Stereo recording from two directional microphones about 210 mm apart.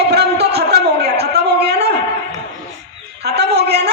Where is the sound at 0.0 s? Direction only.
50° right (ahead or behind).